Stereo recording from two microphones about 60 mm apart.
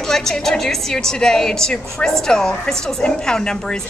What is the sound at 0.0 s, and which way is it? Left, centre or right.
A woman's voice, centre.